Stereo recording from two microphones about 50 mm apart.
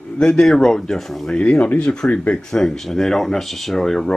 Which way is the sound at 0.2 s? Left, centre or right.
Centre.